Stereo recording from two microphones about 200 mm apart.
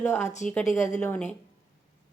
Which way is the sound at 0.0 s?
10° left (ahead or behind).